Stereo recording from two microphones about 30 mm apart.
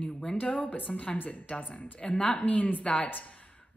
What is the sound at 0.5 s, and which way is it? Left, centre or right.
Speech, left.